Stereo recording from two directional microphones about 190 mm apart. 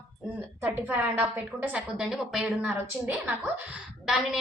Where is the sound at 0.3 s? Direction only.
10° right (ahead or behind).